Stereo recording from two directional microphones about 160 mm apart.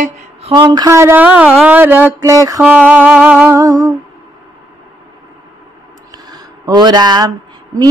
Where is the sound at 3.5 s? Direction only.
20° right (ahead or behind).